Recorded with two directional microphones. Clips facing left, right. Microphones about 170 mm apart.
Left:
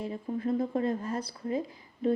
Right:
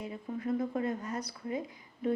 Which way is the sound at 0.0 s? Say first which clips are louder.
Left 4 dB; 30° left (ahead or behind).